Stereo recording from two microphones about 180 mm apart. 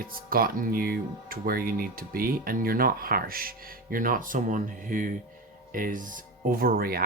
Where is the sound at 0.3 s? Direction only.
55° right (ahead or behind).